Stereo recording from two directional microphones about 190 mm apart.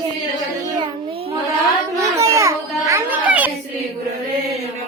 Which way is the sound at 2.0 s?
15° right (ahead or behind).